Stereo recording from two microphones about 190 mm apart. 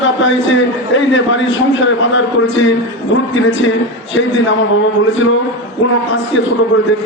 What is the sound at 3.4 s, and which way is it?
Speech, 90° left.